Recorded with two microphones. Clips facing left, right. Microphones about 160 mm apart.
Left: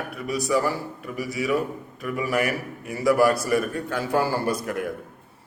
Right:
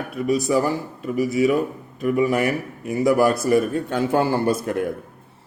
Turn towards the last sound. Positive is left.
turn(degrees=-25)  # may be behind; listen again after turning